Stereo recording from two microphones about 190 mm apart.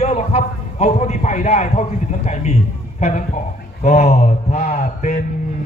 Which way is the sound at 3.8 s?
35° left (ahead or behind).